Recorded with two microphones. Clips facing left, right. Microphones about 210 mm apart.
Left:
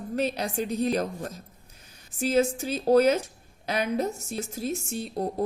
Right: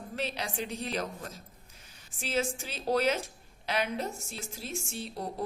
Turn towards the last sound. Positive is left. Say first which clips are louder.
# left 7 dB
turn(degrees=45)  # may be behind; listen again after turning